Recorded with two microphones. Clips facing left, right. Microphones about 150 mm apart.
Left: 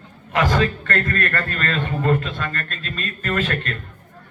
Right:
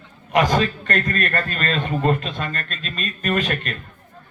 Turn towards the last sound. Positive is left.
turn(degrees=-20)  # may be behind; listen again after turning